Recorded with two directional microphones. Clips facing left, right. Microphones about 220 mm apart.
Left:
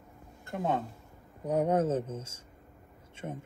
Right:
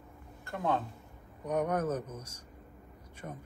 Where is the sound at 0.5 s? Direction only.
20° left (ahead or behind).